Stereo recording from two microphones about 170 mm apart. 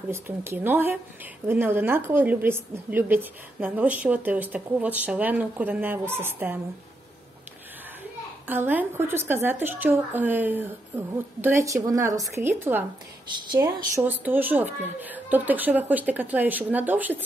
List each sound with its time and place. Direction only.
0.1 s a woman's voice: 15° right (ahead or behind)
8.5 s a woman's voice: 10° right (ahead or behind)
13.3 s speech: 25° right (ahead or behind)
14.0 s a woman's voice: 10° right (ahead or behind)